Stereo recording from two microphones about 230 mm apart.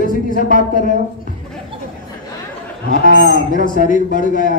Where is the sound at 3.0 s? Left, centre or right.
Right.